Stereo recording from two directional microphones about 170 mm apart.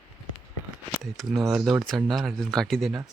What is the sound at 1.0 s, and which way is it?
Speech, centre (ahead or behind).